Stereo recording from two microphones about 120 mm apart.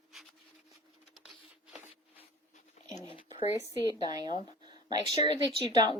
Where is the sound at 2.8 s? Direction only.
80° left.